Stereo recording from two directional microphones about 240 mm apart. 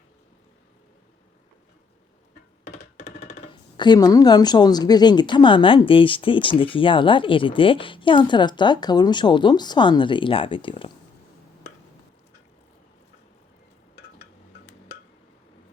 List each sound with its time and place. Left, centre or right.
3.2 s speech: left